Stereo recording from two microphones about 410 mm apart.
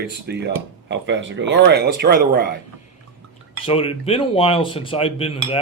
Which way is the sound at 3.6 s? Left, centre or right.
Centre.